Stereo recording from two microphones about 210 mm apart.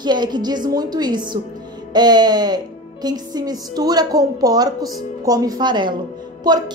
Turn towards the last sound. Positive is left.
turn(degrees=-20)  # may be behind; listen again after turning